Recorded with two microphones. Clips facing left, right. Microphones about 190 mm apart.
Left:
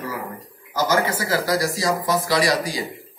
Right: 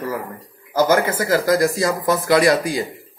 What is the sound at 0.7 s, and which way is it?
Speech, 50° right (ahead or behind).